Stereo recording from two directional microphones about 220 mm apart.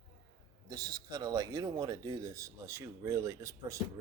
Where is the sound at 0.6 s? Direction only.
15° right (ahead or behind).